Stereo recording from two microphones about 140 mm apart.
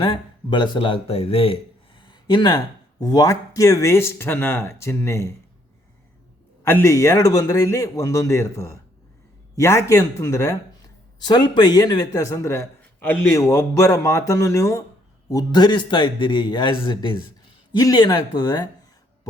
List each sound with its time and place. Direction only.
0.0 s speech: 35° left (ahead or behind)
2.0 s a sound: 35° left (ahead or behind)
3.0 s speech: 25° left (ahead or behind)
6.7 s speech: 20° left (ahead or behind)